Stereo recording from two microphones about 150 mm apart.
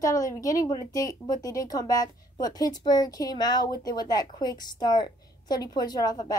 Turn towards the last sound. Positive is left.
turn(degrees=25)  # may be behind; listen again after turning